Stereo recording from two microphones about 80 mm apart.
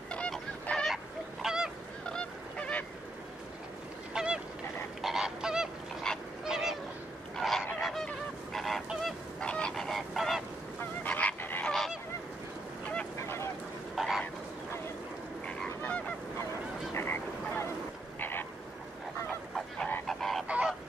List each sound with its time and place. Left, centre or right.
0.1 s fowl: centre
0.9 s fowl: centre
2.0 s goose: centre
4.1 s goose: centre
6.1 s goose: centre
6.4 s fowl: centre
7.3 s goose: centre
11.1 s goose: centre
11.6 s goose: centre
13.9 s a sound: centre
15.4 s goose: centre
16.9 s frog: left
20.1 s goose: centre
20.4 s goose: centre